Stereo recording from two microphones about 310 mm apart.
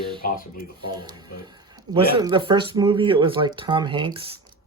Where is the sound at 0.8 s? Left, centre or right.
Centre.